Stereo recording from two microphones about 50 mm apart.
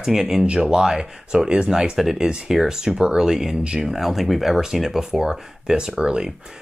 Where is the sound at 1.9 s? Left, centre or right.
Centre.